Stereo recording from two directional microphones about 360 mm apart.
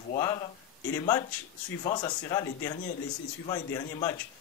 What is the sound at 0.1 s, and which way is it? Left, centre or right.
Speech, centre.